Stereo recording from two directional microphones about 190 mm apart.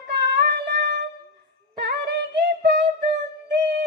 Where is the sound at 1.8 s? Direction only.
60° right (ahead or behind).